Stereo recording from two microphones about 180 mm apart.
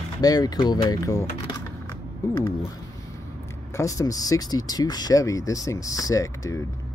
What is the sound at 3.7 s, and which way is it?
Speech, 20° left (ahead or behind).